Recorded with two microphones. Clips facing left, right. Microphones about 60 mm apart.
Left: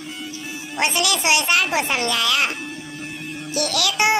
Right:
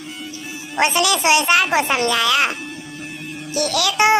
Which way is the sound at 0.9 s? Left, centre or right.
Right.